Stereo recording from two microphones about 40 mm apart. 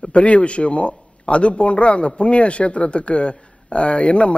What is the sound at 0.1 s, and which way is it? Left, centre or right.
A man's voice, left.